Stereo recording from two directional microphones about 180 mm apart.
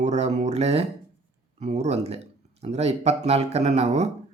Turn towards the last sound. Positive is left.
turn(degrees=-40)  # may be behind; listen again after turning